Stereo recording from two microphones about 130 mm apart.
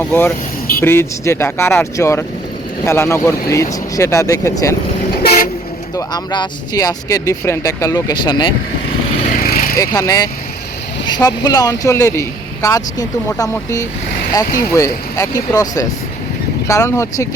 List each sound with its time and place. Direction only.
0.0 s speech: 15° left (ahead or behind)
6.0 s speech: 35° left (ahead or behind)
9.2 s vehicle: 85° left
9.7 s speech: 30° left (ahead or behind)